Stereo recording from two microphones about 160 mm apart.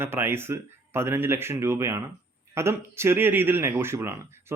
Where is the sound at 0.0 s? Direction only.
15° right (ahead or behind).